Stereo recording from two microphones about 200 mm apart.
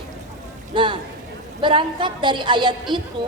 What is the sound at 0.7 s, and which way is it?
A woman's voice, 25° right (ahead or behind).